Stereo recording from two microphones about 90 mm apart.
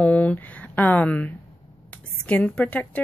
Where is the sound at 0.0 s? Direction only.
15° left (ahead or behind).